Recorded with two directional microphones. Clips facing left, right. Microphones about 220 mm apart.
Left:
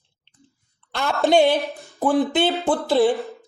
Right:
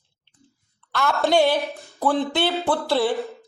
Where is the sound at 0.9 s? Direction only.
20° left (ahead or behind).